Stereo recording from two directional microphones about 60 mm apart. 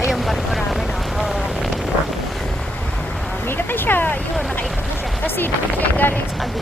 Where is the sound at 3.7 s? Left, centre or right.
Left.